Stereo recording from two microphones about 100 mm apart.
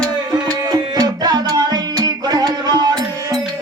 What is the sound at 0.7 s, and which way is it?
Music, 40° right (ahead or behind).